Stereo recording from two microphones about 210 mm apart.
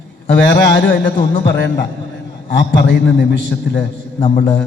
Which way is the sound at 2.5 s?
55° left (ahead or behind).